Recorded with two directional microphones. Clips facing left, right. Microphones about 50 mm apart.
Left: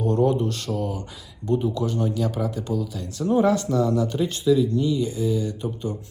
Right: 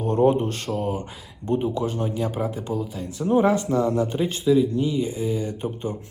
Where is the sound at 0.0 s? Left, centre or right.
Right.